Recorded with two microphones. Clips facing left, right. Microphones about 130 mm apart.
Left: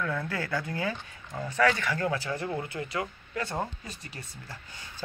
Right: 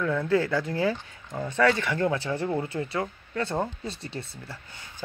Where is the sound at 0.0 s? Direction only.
20° right (ahead or behind).